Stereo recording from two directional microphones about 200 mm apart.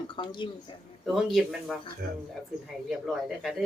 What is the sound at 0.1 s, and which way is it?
Speech, 25° left (ahead or behind).